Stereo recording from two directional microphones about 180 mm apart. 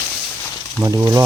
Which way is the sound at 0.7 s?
20° right (ahead or behind).